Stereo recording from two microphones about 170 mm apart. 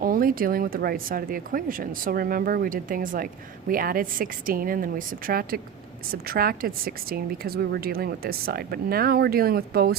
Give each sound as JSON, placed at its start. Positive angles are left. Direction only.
{"t": 0.0, "sound": "a woman's voice", "side_deg": -55}